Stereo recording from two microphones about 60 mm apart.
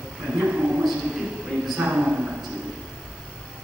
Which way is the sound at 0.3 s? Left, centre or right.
Right.